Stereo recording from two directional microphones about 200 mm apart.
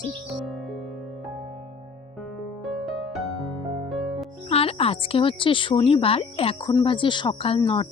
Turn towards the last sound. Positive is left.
turn(degrees=25)  # may be behind; listen again after turning